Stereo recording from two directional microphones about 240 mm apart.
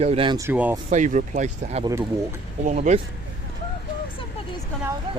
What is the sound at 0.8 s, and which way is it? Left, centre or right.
Speech, right.